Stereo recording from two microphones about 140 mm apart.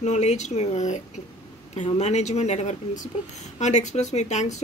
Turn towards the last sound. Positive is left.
turn(degrees=55)  # may be behind; listen again after turning